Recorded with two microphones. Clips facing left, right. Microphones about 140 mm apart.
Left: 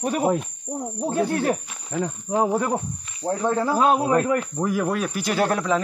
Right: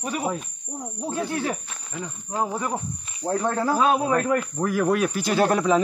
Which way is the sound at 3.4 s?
Centre (ahead or behind).